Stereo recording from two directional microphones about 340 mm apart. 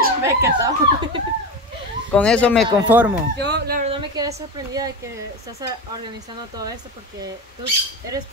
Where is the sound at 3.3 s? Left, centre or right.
Right; by 4.9 s centre.